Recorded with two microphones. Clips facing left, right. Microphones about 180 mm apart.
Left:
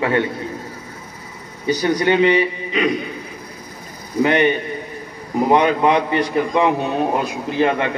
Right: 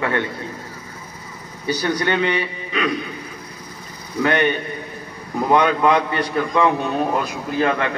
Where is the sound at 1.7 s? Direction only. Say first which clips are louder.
Left 5 dB; 15° left (ahead or behind).